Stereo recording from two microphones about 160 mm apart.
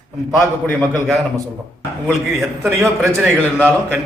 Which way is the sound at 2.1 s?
Centre (ahead or behind).